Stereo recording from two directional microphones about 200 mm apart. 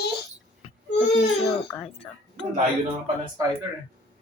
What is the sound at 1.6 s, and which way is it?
Speech, 10° left (ahead or behind).